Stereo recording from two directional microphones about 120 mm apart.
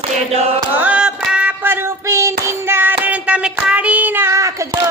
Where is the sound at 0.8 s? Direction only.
10° right (ahead or behind).